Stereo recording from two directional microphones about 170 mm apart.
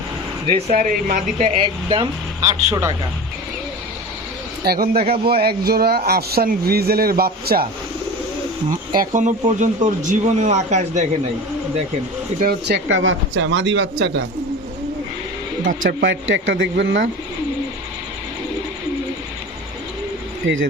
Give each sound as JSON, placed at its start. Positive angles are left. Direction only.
{"t": 0.4, "sound": "speech", "side_deg": -30}
{"t": 0.8, "sound": "speech", "side_deg": -50}
{"t": 1.5, "sound": "speech", "side_deg": -30}
{"t": 4.6, "sound": "speech", "side_deg": -65}
{"t": 4.9, "sound": "speech", "side_deg": -35}
{"t": 5.2, "sound": "speech", "side_deg": -65}
{"t": 9.0, "sound": "speech", "side_deg": -45}
{"t": 12.4, "sound": "speech", "side_deg": -70}
{"t": 15.6, "sound": "speech", "side_deg": -80}
{"t": 20.4, "sound": "speech", "side_deg": -90}